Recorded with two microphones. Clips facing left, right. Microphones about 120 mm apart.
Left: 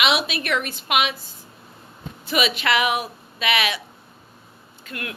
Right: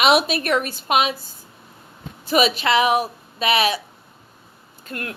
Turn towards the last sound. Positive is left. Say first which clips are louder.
# right 2 dB
turn(degrees=-40)  # may be behind; listen again after turning